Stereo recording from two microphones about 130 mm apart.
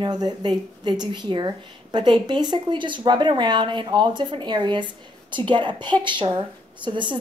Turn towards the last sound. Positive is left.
turn(degrees=-35)  # may be behind; listen again after turning